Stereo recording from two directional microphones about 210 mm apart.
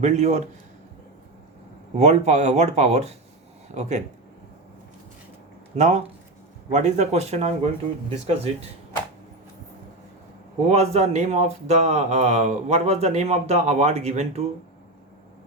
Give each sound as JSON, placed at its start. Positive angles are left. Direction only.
{"t": 0.0, "sound": "speech", "side_deg": -30}
{"t": 2.0, "sound": "speech", "side_deg": -35}
{"t": 5.7, "sound": "speech", "side_deg": -35}
{"t": 10.7, "sound": "speech", "side_deg": -30}